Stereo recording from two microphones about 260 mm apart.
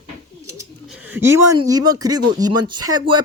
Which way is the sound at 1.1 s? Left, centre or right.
Centre.